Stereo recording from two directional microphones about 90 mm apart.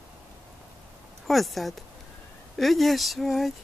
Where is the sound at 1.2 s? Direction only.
Centre (ahead or behind).